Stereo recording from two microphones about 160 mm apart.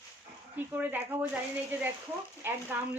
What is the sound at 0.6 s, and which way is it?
A woman's voice, 10° right (ahead or behind).